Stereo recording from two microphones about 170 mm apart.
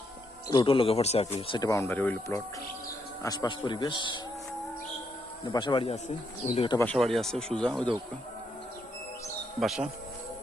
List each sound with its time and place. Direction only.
0.4 s speech: 30° left (ahead or behind); by 2.4 s 10° left (ahead or behind)
3.2 s speech: 25° left (ahead or behind)
5.5 s speech: 25° left (ahead or behind)
6.7 s speech: 5° left (ahead or behind)
9.6 s speech: centre (ahead or behind)